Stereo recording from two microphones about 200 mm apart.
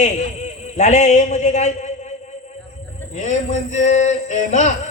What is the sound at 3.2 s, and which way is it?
Music, 35° left (ahead or behind).